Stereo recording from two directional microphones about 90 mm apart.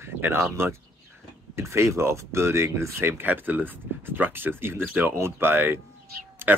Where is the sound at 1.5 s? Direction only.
30° right (ahead or behind).